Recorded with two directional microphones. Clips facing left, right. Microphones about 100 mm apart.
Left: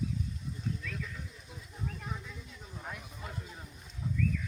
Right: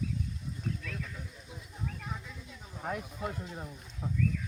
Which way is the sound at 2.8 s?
55° right (ahead or behind).